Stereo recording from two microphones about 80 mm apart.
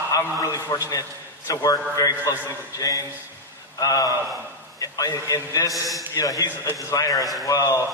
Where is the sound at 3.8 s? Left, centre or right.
Left.